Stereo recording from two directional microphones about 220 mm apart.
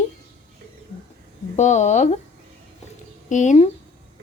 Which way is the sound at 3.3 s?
35° left (ahead or behind).